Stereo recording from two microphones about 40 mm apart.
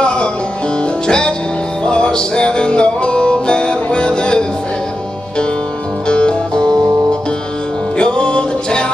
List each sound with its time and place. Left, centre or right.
0.0 s music: left
6.0 s music: left
8.0 s music: left